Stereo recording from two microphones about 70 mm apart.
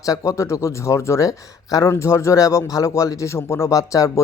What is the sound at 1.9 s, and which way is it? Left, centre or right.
Speech, left.